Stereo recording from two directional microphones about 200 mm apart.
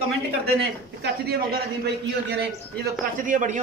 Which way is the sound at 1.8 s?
55° right (ahead or behind).